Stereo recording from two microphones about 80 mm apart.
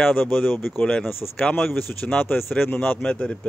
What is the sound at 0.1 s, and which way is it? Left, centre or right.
Speech, left.